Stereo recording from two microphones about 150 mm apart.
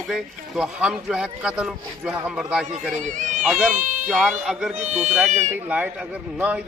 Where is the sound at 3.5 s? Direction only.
5° right (ahead or behind).